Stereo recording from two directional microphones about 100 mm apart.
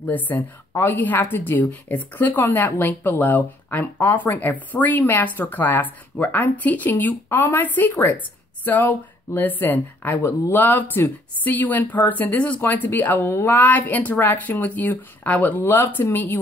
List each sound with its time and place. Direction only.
0.0 s a woman's voice: 15° left (ahead or behind)